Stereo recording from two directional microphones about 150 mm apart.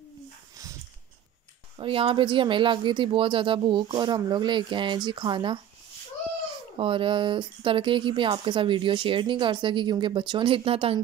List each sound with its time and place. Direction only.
1.8 s speech: 35° right (ahead or behind)
6.8 s speech: 35° right (ahead or behind)